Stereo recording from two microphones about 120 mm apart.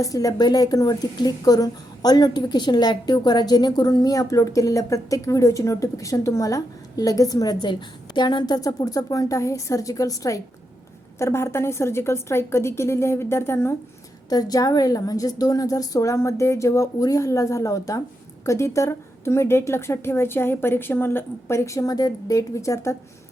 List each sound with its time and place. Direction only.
0.0 s a woman's voice: 30° left (ahead or behind)
14.3 s a woman's voice: 30° left (ahead or behind)